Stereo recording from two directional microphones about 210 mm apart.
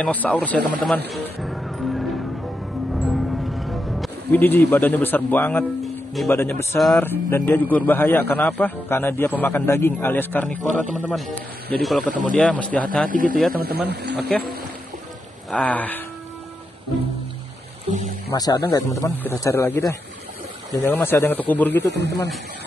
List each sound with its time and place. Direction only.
0.0 s a man's voice: 5° left (ahead or behind)
1.2 s music: centre (ahead or behind)
6.2 s a man's voice: 10° left (ahead or behind)
13.1 s a man's voice: 40° right (ahead or behind)
15.5 s a man's voice: 5° left (ahead or behind)
18.3 s a man's voice: 15° left (ahead or behind)
21.8 s a man's voice: 55° right (ahead or behind)